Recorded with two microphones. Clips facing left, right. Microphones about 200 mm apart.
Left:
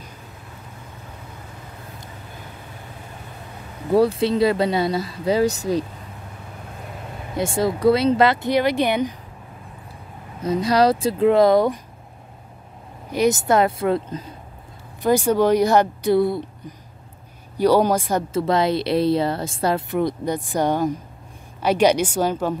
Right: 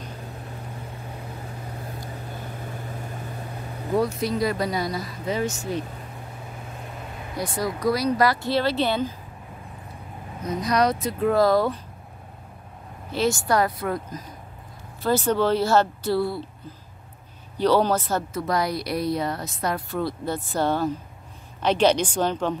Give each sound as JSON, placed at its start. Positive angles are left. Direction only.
{"t": 3.9, "sound": "speech", "side_deg": 30}
{"t": 7.3, "sound": "speech", "side_deg": 25}
{"t": 10.4, "sound": "speech", "side_deg": 30}
{"t": 13.1, "sound": "speech", "side_deg": 20}
{"t": 15.0, "sound": "speech", "side_deg": 15}
{"t": 18.3, "sound": "speech", "side_deg": 25}
{"t": 19.9, "sound": "speech", "side_deg": 20}